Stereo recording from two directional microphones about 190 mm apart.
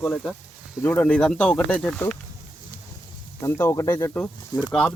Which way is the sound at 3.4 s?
10° left (ahead or behind).